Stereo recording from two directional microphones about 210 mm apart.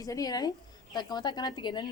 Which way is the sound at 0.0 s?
15° left (ahead or behind).